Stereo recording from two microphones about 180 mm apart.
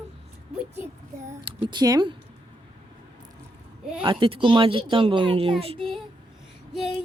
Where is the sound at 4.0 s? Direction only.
25° right (ahead or behind).